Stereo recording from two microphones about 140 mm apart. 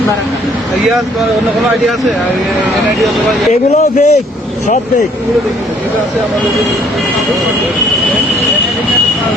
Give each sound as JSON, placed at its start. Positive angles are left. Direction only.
{"t": 3.5, "sound": "speech", "side_deg": 55}